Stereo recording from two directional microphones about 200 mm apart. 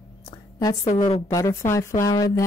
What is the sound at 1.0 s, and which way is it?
Speech, 20° left (ahead or behind).